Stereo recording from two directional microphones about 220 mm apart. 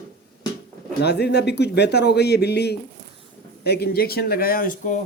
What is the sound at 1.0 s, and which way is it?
Speech, 50° left (ahead or behind).